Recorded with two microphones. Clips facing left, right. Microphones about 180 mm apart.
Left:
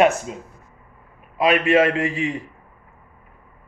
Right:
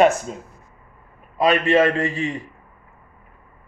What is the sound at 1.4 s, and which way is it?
Speech, 10° left (ahead or behind).